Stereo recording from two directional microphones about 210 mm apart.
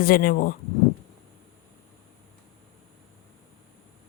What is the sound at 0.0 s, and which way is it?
Speech, 45° left (ahead or behind).